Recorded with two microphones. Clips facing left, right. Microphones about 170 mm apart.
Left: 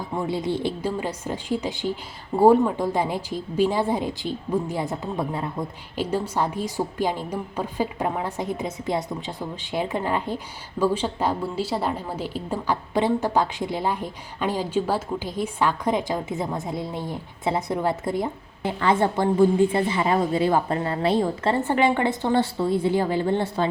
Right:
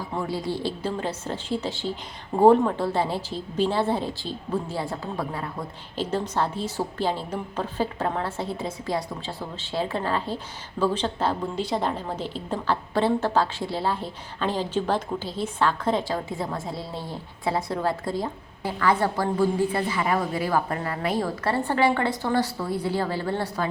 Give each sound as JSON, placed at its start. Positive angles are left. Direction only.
{"t": 0.2, "sound": "a woman's voice", "side_deg": 20}